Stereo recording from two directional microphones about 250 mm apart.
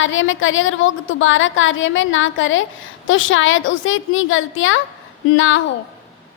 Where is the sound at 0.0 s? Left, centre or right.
Left.